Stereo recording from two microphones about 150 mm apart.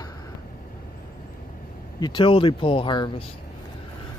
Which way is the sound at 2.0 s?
35° left (ahead or behind).